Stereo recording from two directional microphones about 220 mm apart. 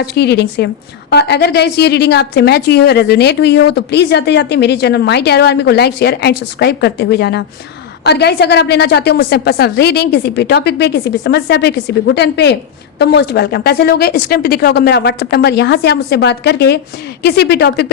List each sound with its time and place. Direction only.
0.0 s a woman's voice: 50° left (ahead or behind)